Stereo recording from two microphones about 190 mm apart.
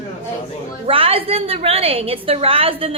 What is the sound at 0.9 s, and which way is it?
A woman's voice, 30° right (ahead or behind).